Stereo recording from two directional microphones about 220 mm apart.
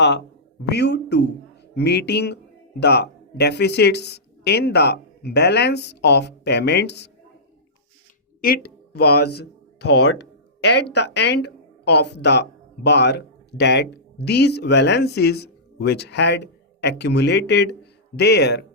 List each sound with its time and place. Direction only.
0.7 s speech: 50° left (ahead or behind)
8.4 s speech: 40° left (ahead or behind)